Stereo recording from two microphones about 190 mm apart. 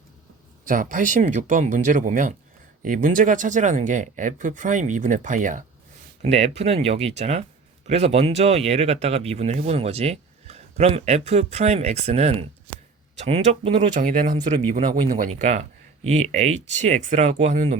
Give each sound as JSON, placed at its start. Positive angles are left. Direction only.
{"t": 0.7, "sound": "speech", "side_deg": -45}